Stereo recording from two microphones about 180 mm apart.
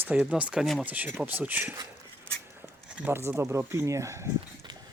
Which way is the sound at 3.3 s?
15° right (ahead or behind).